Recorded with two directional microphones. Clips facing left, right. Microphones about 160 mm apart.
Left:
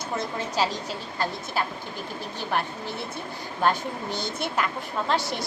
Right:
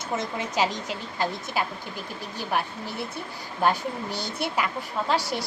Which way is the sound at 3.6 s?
10° right (ahead or behind).